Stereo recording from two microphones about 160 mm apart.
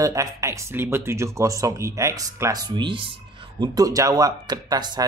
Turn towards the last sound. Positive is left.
turn(degrees=-25)  # may be behind; listen again after turning